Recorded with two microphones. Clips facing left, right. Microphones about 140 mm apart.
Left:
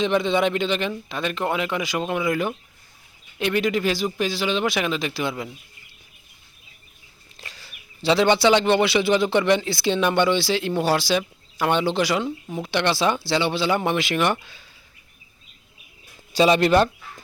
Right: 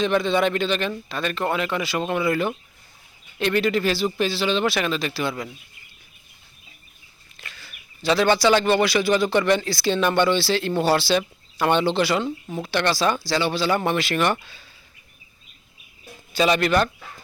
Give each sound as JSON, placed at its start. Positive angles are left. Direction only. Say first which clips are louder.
{"t": 0.0, "sound": "speech", "louder": "even", "side_deg": 20}
{"t": 7.3, "sound": "speech", "louder": "even", "side_deg": 35}
{"t": 16.3, "sound": "speech", "louder": "left 3 dB", "side_deg": 30}